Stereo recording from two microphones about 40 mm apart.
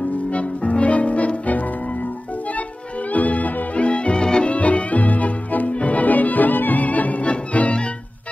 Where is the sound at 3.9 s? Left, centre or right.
Left.